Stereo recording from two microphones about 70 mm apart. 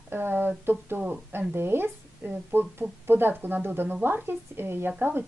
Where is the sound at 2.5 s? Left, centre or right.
Right.